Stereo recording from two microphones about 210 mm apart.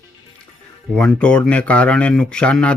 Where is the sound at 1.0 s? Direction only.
5° left (ahead or behind).